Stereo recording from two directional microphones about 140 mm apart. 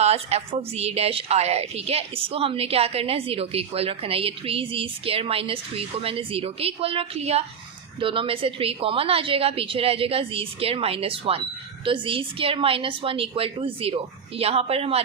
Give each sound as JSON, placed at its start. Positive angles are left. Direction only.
{"t": 0.0, "sound": "a woman's voice", "side_deg": -50}